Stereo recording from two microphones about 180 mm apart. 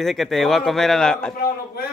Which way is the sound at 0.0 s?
Centre (ahead or behind).